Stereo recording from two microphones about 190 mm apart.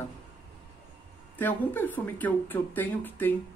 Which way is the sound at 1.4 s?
10° left (ahead or behind).